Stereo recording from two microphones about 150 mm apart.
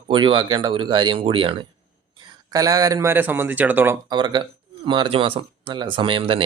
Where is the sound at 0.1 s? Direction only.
30° right (ahead or behind); by 3.9 s 10° right (ahead or behind).